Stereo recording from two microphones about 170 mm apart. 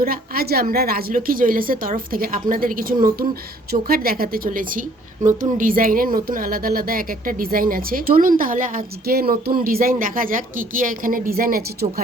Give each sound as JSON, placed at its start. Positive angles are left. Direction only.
{"t": 0.0, "sound": "a woman's voice", "side_deg": -60}